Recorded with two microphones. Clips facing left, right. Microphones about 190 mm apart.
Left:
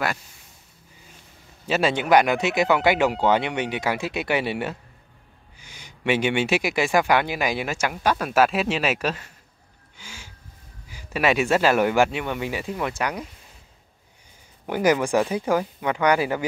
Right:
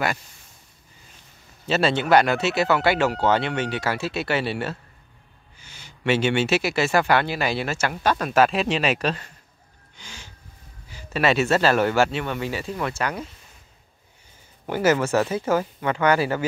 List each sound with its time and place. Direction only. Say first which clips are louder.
1.7 s speech: even; 10° left (ahead or behind)
9.9 s a sound: even; 10° left (ahead or behind)
10.9 s speech: even; 10° left (ahead or behind)
14.7 s speech: even; 15° left (ahead or behind)